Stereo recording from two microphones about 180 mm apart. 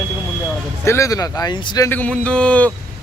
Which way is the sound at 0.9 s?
15° left (ahead or behind).